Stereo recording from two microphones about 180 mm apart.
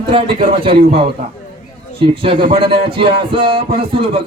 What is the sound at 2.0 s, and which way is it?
Music, 30° right (ahead or behind).